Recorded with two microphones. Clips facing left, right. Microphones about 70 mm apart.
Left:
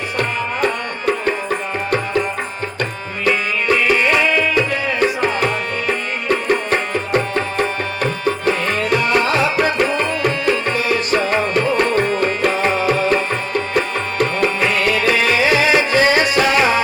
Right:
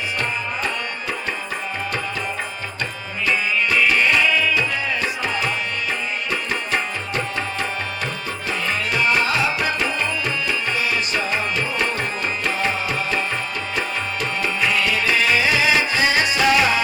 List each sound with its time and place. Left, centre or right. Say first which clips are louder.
0.2 s music: left 8 dB; left
3.2 s music: left 4 dB; left
3.9 s music: left 2 dB; left
4.3 s music: left 4 dB; left
6.2 s music: left 8 dB; left